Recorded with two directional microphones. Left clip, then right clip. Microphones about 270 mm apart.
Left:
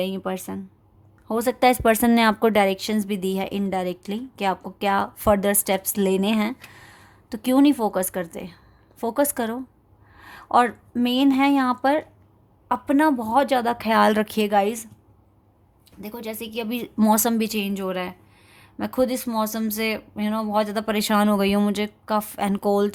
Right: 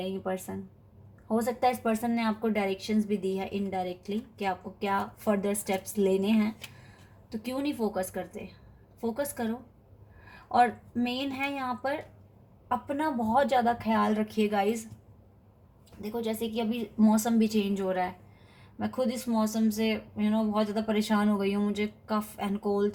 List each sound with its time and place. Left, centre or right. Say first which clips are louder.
0.0 s a woman's voice: left 6 dB; left
16.0 s speech: even; left